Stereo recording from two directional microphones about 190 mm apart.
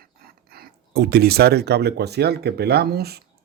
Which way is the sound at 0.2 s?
55° right (ahead or behind).